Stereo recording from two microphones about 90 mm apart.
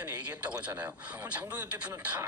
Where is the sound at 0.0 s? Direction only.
15° right (ahead or behind).